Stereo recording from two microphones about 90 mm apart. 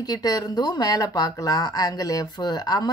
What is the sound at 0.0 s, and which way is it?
Speech, 45° left (ahead or behind).